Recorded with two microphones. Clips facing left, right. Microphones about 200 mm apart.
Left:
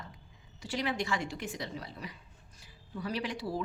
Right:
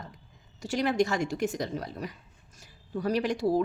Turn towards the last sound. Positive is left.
turn(degrees=-45)  # may be behind; listen again after turning